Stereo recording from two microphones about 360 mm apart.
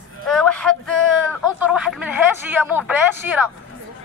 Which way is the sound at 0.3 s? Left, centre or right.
Centre.